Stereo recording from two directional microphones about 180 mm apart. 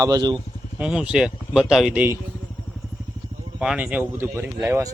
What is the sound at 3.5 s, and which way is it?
Speech, 5° right (ahead or behind).